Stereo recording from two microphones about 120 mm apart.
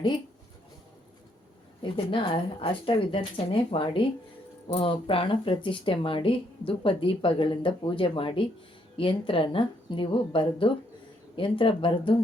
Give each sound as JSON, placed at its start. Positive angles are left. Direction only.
{"t": 1.8, "sound": "speech", "side_deg": 45}